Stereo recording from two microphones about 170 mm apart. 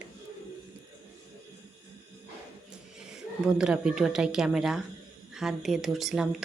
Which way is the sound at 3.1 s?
5° right (ahead or behind).